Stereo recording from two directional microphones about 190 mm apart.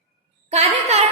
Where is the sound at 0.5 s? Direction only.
35° right (ahead or behind).